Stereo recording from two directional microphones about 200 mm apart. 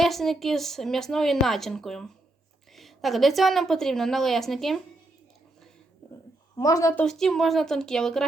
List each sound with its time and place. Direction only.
0.0 s a woman's voice: centre (ahead or behind)
6.6 s a woman's voice: 15° left (ahead or behind)
7.0 s a woman's voice: centre (ahead or behind)